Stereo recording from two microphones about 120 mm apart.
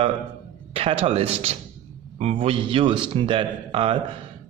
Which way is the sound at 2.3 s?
45° right (ahead or behind).